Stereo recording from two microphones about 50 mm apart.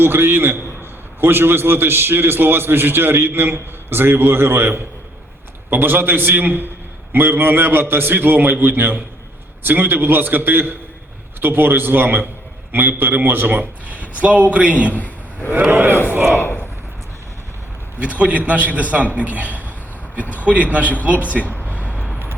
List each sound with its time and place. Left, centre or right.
0.0 s a man's voice: right
15.6 s a man's voice: right
16.0 s battle cry: right
18.0 s a man's voice: right
21.4 s a sound: left
21.8 s vehicle: left